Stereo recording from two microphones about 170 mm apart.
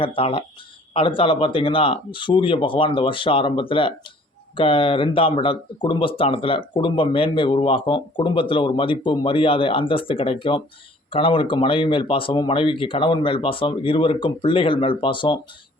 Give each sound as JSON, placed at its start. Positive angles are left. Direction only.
{"t": 0.0, "sound": "speech", "side_deg": 30}